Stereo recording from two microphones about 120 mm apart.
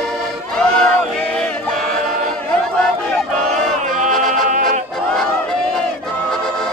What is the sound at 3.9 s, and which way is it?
Music, 90° right.